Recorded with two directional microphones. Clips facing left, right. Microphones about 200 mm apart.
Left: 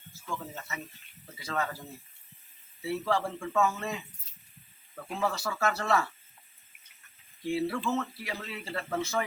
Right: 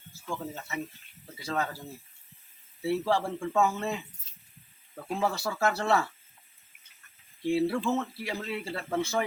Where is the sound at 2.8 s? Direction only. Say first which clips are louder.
Right 3 dB; 25° right (ahead or behind).